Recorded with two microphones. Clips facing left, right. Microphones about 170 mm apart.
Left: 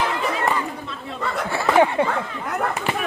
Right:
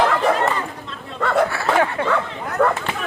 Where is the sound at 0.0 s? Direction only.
75° right (ahead or behind).